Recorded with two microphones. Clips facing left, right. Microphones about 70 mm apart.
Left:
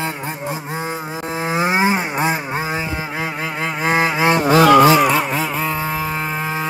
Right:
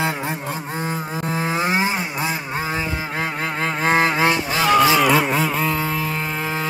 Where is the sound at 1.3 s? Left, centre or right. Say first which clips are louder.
Left 3 dB; centre.